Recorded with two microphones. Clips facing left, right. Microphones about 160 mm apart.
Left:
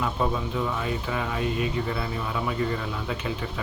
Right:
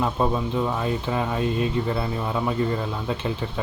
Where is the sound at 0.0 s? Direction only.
30° right (ahead or behind).